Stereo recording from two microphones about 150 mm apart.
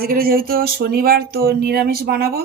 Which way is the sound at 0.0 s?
75° right (ahead or behind).